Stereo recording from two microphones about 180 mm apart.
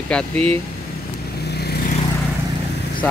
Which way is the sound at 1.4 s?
65° left (ahead or behind).